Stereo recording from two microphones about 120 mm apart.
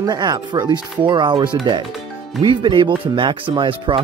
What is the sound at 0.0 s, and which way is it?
Speech, 35° right (ahead or behind).